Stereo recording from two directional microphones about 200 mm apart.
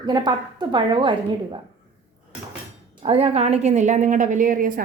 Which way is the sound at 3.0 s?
30° right (ahead or behind).